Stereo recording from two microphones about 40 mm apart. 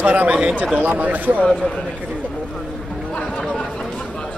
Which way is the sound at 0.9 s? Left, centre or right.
Right.